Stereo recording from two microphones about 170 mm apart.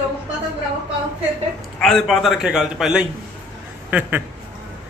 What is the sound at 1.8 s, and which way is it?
Speech, centre (ahead or behind).